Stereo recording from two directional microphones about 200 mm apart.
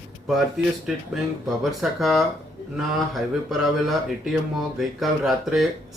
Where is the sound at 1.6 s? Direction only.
Centre (ahead or behind).